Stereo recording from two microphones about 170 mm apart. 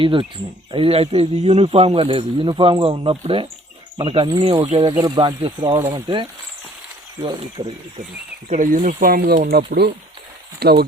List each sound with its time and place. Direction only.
0.0 s a man's voice: 30° right (ahead or behind)
8.4 s speech: 50° right (ahead or behind); by 10.8 s 70° right (ahead or behind)